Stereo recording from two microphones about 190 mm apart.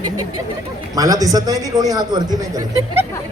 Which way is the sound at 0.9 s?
20° right (ahead or behind).